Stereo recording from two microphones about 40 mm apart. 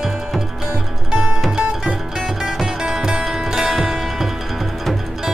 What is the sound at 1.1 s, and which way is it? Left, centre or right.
Music, right.